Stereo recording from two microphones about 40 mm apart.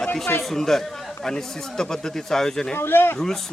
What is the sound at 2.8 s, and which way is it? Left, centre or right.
Speech, left.